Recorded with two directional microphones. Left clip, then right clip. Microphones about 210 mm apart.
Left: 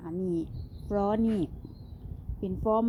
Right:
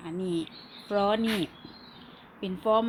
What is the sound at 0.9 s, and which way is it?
Speech, 30° right (ahead or behind).